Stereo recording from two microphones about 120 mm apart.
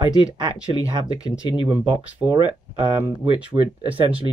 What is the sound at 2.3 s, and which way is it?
Speech, 35° right (ahead or behind).